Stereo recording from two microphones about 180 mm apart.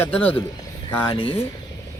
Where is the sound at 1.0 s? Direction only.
25° left (ahead or behind).